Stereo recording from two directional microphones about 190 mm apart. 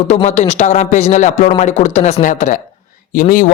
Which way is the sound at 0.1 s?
35° left (ahead or behind).